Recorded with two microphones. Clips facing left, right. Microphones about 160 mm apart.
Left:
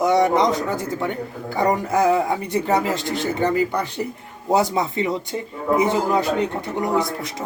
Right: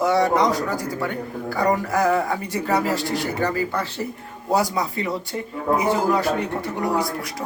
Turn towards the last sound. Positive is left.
turn(degrees=20)  # may be behind; listen again after turning